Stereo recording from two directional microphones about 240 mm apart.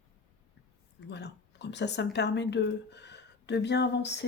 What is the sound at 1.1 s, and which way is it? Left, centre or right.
Speech, left.